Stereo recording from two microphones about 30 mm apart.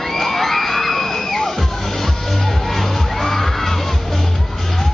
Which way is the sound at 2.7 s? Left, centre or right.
Centre.